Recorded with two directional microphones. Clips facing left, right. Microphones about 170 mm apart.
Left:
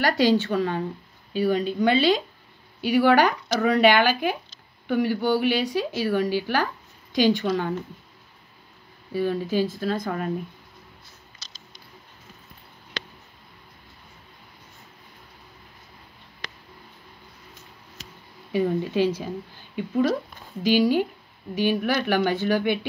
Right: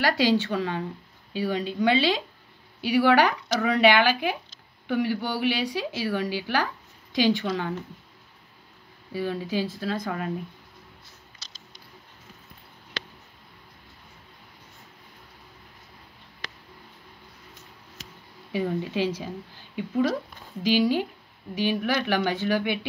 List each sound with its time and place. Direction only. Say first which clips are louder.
0.0 s speech: left 2 dB; 50° left (ahead or behind)
9.1 s speech: left 4 dB; 45° left (ahead or behind)
19.7 s speech: left 2 dB; 45° left (ahead or behind)